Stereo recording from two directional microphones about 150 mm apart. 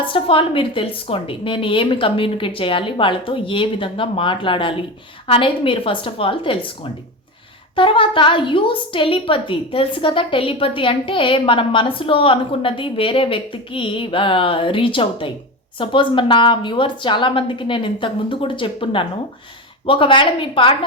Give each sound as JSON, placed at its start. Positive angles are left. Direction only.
{"t": 0.1, "sound": "a woman's voice", "side_deg": 35}
{"t": 7.8, "sound": "a woman's voice", "side_deg": 35}